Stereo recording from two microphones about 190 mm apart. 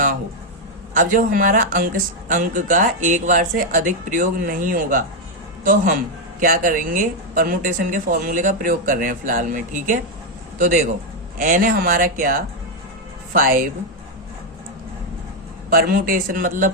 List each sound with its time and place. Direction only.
0.9 s a man's voice: 45° right (ahead or behind)
15.7 s speech: 50° right (ahead or behind)